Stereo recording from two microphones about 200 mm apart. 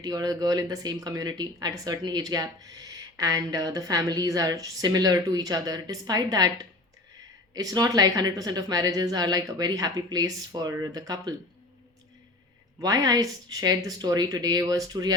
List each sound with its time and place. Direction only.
0.0 s speech: 20° right (ahead or behind)
12.8 s speech: 20° right (ahead or behind)